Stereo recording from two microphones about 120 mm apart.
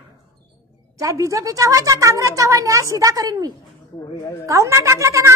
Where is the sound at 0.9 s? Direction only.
25° right (ahead or behind).